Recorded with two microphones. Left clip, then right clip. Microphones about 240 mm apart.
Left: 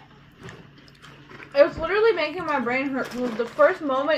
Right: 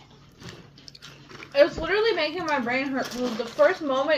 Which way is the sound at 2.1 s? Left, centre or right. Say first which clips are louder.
Left 1 dB; centre.